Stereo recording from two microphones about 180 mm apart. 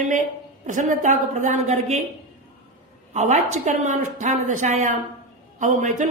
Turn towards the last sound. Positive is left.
turn(degrees=-45)  # may be behind; listen again after turning